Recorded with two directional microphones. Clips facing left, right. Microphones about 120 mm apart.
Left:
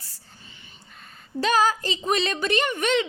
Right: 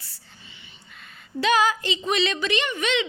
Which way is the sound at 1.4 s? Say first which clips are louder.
Even; 40° left (ahead or behind).